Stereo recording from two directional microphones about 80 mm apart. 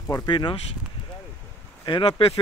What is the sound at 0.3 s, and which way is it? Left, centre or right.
Speech, left.